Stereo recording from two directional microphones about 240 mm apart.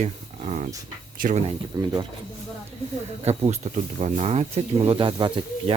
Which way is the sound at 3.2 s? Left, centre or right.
Right.